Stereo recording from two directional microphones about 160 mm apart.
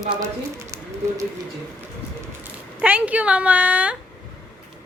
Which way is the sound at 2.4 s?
10° right (ahead or behind).